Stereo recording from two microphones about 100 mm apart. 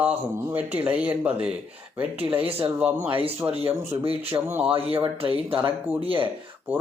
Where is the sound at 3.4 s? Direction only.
20° right (ahead or behind).